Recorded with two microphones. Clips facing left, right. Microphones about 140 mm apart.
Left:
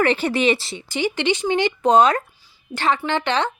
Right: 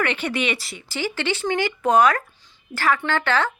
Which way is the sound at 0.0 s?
35° left (ahead or behind).